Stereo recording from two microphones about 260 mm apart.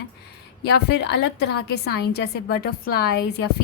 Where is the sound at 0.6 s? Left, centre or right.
Left.